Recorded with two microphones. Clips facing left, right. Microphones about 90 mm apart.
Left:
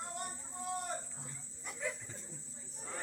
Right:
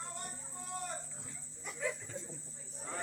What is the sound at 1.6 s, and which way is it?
Dog, centre (ahead or behind).